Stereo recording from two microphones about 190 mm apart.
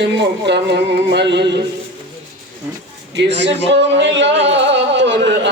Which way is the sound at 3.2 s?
65° right (ahead or behind).